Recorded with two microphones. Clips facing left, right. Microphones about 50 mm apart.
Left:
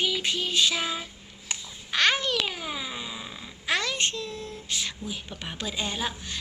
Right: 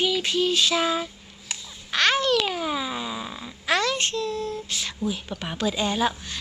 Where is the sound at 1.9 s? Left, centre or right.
Centre.